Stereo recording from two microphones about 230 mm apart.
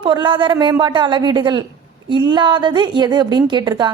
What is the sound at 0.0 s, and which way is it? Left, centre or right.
A woman's voice, right.